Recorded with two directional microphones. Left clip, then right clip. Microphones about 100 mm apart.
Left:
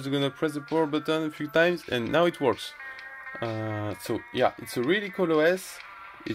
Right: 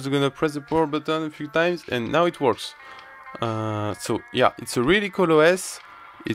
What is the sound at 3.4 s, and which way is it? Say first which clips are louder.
Speech: right 6 dB; 60° right (ahead or behind).